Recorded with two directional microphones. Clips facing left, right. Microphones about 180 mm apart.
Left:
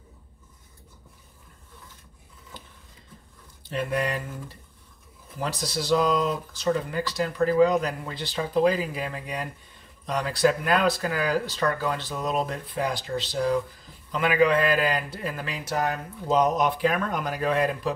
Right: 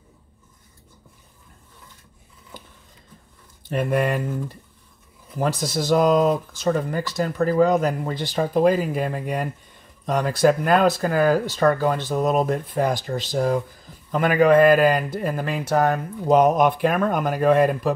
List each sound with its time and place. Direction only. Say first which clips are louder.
3.7 s speech: right 5 dB; 55° right (ahead or behind)
5.4 s speech: right 6 dB; 50° right (ahead or behind)